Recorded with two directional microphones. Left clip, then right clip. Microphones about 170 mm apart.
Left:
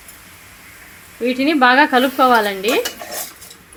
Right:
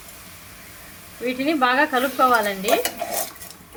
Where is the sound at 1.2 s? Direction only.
55° left (ahead or behind).